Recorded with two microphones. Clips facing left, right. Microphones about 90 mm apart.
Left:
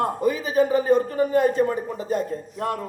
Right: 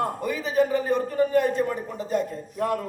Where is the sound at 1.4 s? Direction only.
35° left (ahead or behind).